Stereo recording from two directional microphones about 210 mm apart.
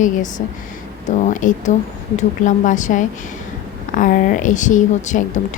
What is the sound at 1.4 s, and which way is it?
A woman's voice, 40° left (ahead or behind).